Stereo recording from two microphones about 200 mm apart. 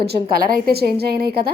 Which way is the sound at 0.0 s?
50° right (ahead or behind).